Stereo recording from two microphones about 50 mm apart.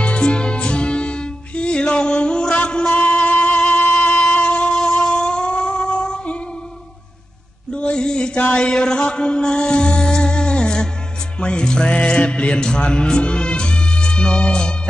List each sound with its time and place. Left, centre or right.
0.0 s music: centre
3.9 s a sound: left
7.7 s mantra: centre
11.3 s music: centre